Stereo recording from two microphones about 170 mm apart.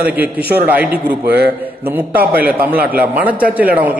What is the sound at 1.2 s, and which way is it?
Speech, 70° right (ahead or behind).